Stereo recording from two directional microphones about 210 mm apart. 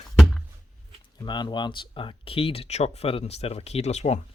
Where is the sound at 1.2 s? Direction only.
20° left (ahead or behind).